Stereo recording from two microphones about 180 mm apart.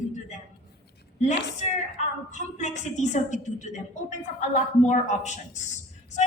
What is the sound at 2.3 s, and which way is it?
A woman's voice, 40° left (ahead or behind).